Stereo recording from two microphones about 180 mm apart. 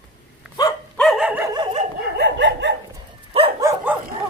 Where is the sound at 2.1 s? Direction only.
75° right (ahead or behind).